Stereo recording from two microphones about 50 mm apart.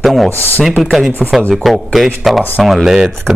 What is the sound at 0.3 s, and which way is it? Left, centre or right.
Speech, left.